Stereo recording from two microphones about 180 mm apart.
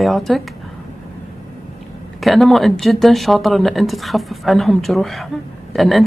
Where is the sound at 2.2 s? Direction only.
Centre (ahead or behind).